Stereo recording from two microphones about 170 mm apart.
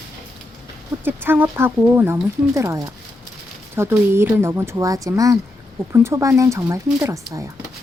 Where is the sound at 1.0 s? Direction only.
10° right (ahead or behind).